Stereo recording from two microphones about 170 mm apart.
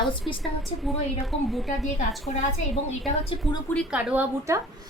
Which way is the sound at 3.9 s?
10° right (ahead or behind).